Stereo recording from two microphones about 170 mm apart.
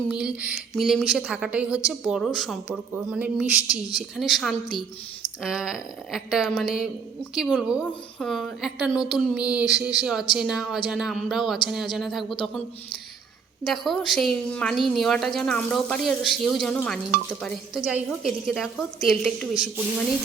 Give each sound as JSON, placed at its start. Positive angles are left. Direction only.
{"t": 0.1, "sound": "a woman's voice", "side_deg": -5}
{"t": 13.7, "sound": "a woman's voice", "side_deg": 0}